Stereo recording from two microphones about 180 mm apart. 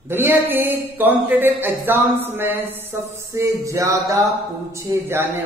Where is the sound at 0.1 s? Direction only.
10° right (ahead or behind).